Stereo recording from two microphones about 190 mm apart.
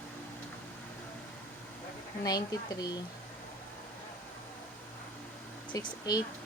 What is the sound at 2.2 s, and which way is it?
Speech, 20° left (ahead or behind).